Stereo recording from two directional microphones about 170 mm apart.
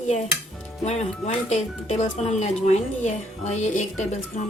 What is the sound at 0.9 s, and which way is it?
Speech, 40° left (ahead or behind).